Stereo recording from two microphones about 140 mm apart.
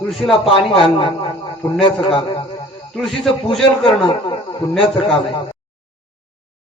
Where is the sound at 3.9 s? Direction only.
35° left (ahead or behind).